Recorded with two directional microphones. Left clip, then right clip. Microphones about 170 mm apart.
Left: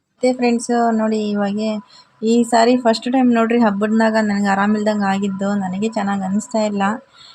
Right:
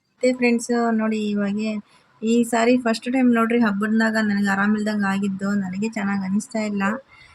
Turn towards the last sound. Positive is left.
turn(degrees=15)  # may be behind; listen again after turning